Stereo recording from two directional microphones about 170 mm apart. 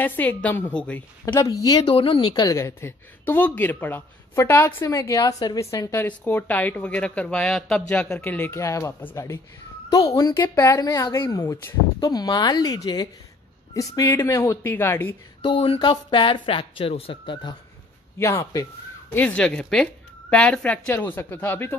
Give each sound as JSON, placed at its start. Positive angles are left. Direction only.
{"t": 0.0, "sound": "a woman's voice", "side_deg": 10}
{"t": 1.2, "sound": "a woman's voice", "side_deg": 20}
{"t": 15.4, "sound": "speech", "side_deg": 35}
{"t": 18.2, "sound": "a woman's voice", "side_deg": 15}
{"t": 19.1, "sound": "a woman's voice", "side_deg": 10}